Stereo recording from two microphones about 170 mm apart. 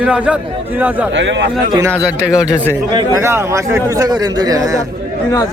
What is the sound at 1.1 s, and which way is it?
Speech, 90° right.